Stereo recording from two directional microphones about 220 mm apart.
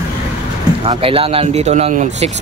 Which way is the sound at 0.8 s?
25° right (ahead or behind).